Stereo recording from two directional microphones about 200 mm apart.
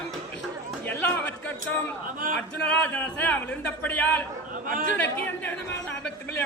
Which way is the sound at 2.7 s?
10° left (ahead or behind).